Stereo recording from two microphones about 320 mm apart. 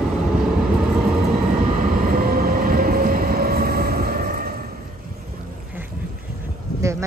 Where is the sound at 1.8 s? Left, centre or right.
Right.